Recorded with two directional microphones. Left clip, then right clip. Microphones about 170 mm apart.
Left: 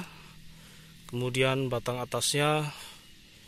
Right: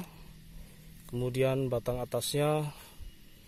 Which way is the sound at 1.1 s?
Centre (ahead or behind).